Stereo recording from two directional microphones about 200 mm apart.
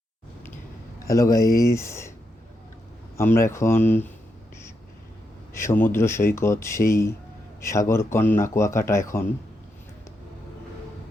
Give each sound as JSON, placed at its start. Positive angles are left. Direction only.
{"t": 1.0, "sound": "speech", "side_deg": 15}
{"t": 3.2, "sound": "speech", "side_deg": 15}
{"t": 5.5, "sound": "speech", "side_deg": 10}